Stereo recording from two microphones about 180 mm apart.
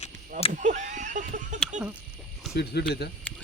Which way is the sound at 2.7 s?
65° left (ahead or behind).